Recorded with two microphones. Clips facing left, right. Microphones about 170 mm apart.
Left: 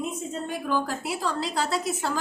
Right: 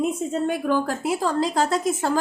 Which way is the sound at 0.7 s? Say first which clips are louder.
Right 5 dB; 50° right (ahead or behind).